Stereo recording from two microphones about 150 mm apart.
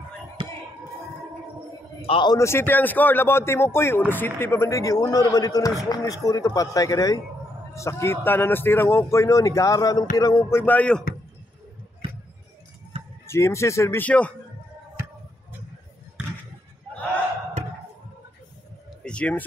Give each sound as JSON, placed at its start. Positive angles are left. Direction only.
{"t": 0.4, "sound": "whispering", "side_deg": -35}
{"t": 2.0, "sound": "a man's voice", "side_deg": 35}
{"t": 2.3, "sound": "speech", "side_deg": 15}
{"t": 12.9, "sound": "a sound", "side_deg": -40}
{"t": 13.3, "sound": "speech", "side_deg": 20}
{"t": 19.0, "sound": "speech", "side_deg": 10}